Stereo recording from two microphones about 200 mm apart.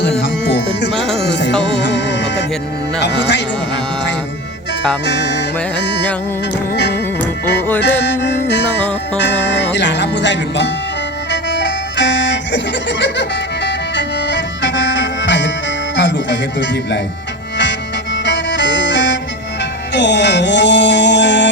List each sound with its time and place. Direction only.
0.2 s music: 60° left (ahead or behind)
0.9 s music: centre (ahead or behind)
1.2 s music: 60° left (ahead or behind)
3.0 s speech: 60° left (ahead or behind)
5.0 s speech: 60° left (ahead or behind)
5.7 s music: 60° left (ahead or behind)